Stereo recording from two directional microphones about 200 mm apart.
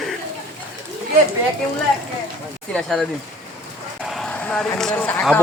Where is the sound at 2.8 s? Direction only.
Centre (ahead or behind).